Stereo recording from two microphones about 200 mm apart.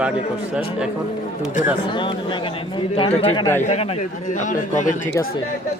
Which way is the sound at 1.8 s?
25° left (ahead or behind).